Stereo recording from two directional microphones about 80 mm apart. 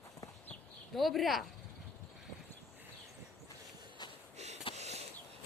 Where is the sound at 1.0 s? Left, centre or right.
Centre.